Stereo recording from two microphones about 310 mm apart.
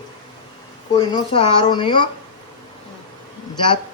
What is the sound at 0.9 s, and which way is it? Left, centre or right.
Speech, centre.